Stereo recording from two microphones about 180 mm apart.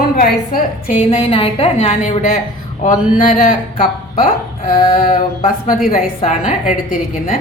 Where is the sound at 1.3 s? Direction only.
30° left (ahead or behind); by 7.3 s 50° left (ahead or behind).